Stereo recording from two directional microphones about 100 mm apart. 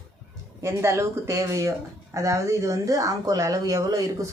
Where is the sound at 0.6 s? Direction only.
30° right (ahead or behind).